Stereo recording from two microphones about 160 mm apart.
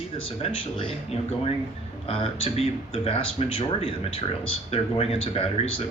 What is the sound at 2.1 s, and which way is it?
Speech, 35° left (ahead or behind).